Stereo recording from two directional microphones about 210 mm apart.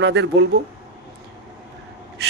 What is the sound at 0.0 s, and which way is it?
Speech, 60° right (ahead or behind).